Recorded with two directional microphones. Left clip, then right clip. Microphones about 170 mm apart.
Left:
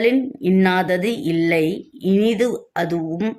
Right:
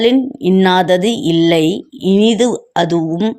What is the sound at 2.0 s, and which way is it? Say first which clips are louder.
Speech: right 6 dB; 5° left (ahead or behind).